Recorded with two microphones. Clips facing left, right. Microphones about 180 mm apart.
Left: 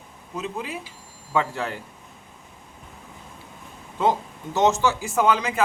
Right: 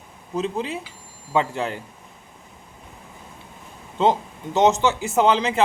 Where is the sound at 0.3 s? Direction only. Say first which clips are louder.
Right 5 dB; 30° right (ahead or behind).